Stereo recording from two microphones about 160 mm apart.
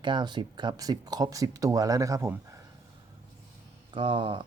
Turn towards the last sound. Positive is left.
turn(degrees=-30)  # may be behind; listen again after turning